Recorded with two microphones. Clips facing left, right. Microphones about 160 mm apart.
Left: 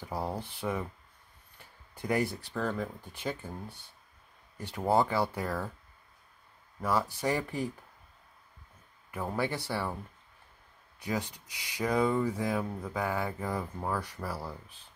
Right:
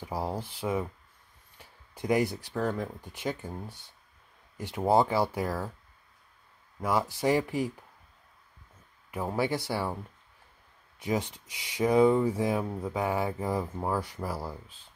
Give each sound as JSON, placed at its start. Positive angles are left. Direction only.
{"t": 0.0, "sound": "speech", "side_deg": -10}
{"t": 6.8, "sound": "speech", "side_deg": -15}
{"t": 9.1, "sound": "speech", "side_deg": -20}
{"t": 11.0, "sound": "speech", "side_deg": -20}